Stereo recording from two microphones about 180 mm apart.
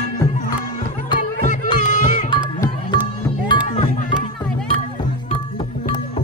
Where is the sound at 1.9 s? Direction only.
45° left (ahead or behind).